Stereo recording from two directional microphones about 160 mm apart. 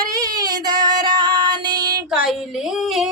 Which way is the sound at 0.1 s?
25° right (ahead or behind).